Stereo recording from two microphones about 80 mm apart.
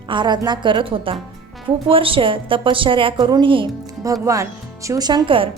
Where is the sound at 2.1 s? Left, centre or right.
Right.